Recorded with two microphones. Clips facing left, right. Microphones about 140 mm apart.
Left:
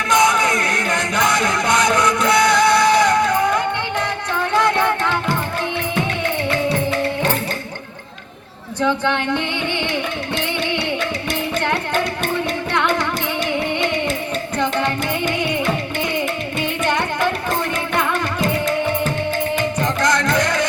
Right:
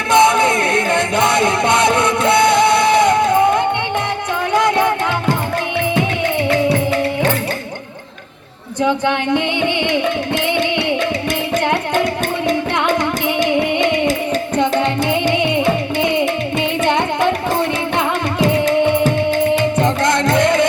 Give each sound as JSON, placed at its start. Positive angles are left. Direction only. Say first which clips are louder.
{"t": 0.1, "sound": "music", "louder": "right 5 dB", "side_deg": -25}
{"t": 8.8, "sound": "speech", "louder": "right 3 dB", "side_deg": -15}
{"t": 13.7, "sound": "music", "louder": "right 5 dB", "side_deg": -15}
{"t": 19.8, "sound": "music", "louder": "right 3 dB", "side_deg": -25}